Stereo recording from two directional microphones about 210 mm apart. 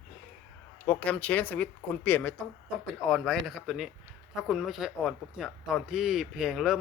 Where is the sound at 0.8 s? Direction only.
10° left (ahead or behind).